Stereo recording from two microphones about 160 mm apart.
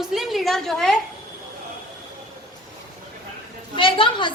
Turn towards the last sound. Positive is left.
turn(degrees=30)  # may be behind; listen again after turning